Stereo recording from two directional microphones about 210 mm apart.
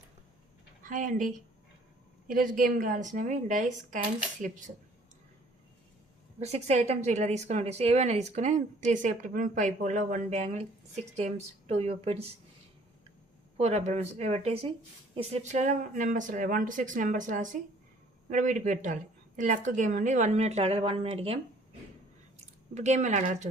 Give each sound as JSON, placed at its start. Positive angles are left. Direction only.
{"t": 0.8, "sound": "a woman's voice", "side_deg": -40}
{"t": 6.4, "sound": "a woman's voice", "side_deg": -30}
{"t": 13.6, "sound": "a woman's voice", "side_deg": -30}
{"t": 22.7, "sound": "a woman's voice", "side_deg": -35}